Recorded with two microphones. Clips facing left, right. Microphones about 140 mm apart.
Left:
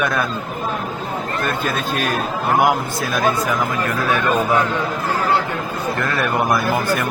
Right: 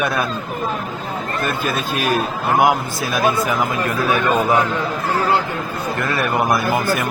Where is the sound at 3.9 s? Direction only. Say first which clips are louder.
Right 1 dB; 10° right (ahead or behind).